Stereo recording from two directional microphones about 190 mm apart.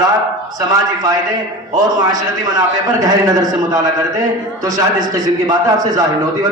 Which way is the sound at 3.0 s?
20° right (ahead or behind).